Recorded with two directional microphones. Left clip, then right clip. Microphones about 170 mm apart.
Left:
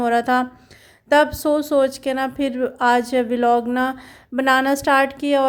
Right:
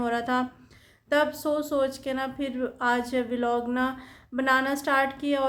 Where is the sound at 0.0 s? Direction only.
45° left (ahead or behind).